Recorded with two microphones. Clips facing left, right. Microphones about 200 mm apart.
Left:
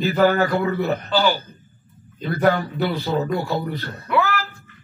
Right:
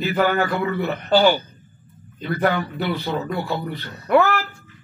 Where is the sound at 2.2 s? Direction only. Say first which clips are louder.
Left 2 dB; 45° left (ahead or behind).